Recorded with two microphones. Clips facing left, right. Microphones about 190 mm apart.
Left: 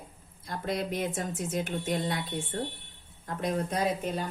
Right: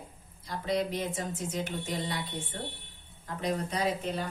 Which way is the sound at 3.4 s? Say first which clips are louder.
Left 1 dB; 50° left (ahead or behind).